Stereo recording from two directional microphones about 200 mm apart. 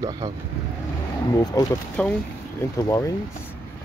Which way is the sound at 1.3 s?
15° left (ahead or behind).